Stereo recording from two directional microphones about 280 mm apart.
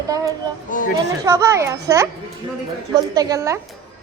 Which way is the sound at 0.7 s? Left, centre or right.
Left.